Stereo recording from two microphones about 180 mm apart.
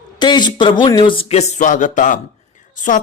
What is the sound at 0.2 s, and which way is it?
A man's voice, 25° left (ahead or behind).